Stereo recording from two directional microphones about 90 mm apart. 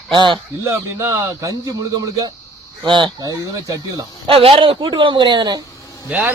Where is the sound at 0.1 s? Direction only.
60° right (ahead or behind).